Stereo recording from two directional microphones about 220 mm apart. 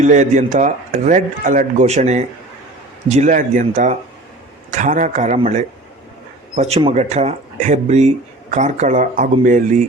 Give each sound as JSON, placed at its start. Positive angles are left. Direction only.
{"t": 0.0, "sound": "speech", "side_deg": -35}